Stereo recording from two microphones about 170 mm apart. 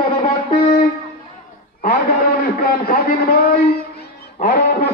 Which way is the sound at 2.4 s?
65° left (ahead or behind).